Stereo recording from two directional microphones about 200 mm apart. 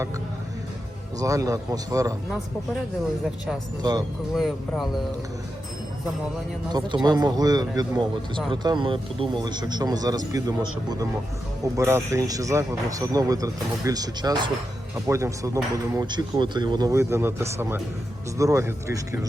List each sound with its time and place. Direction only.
1.2 s speech: 15° right (ahead or behind)
4.4 s speech: centre (ahead or behind)
6.7 s speech: 20° right (ahead or behind)